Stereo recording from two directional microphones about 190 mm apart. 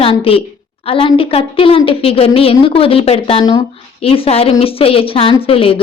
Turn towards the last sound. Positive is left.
turn(degrees=30)  # may be behind; listen again after turning